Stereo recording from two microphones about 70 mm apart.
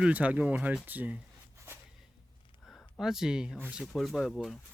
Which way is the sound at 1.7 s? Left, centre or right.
Right.